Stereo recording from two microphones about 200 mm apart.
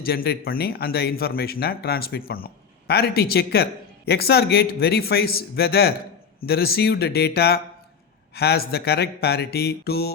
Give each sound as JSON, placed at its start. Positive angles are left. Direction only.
{"t": 0.0, "sound": "speech", "side_deg": 50}